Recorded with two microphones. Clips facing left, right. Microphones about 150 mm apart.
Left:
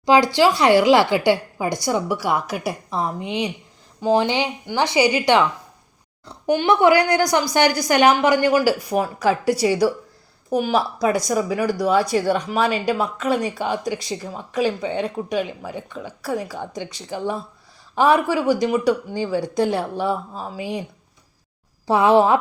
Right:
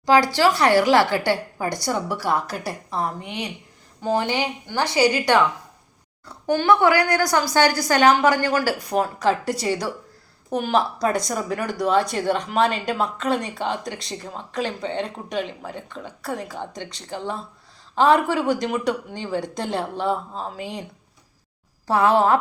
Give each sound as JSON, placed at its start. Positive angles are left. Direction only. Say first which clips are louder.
{"t": 0.0, "sound": "speech", "louder": "left 2 dB", "side_deg": 15}
{"t": 21.8, "sound": "speech", "louder": "left 3 dB", "side_deg": 15}